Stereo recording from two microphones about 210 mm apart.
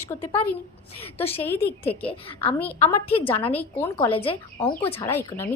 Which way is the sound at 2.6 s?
10° left (ahead or behind).